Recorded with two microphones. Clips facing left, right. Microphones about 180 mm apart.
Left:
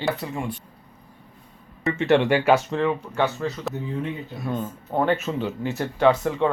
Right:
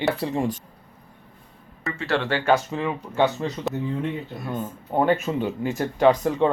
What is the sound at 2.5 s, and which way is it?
Speech, centre (ahead or behind).